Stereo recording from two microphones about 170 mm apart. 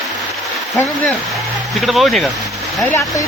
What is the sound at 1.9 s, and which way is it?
Speech, centre (ahead or behind).